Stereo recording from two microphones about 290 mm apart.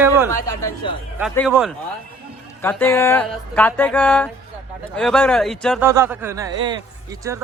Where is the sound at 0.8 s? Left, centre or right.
Centre.